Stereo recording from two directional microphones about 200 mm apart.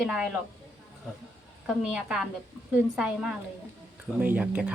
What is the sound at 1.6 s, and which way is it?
Speech, centre (ahead or behind).